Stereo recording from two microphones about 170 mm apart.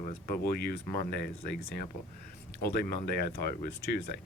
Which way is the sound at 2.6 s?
65° left (ahead or behind).